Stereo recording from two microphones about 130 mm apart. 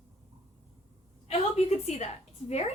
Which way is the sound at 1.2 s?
55° left (ahead or behind).